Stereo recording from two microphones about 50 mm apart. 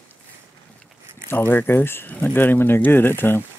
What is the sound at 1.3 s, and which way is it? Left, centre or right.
Speech, left.